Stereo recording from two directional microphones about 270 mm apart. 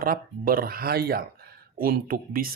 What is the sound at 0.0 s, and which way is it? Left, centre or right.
Speech, right.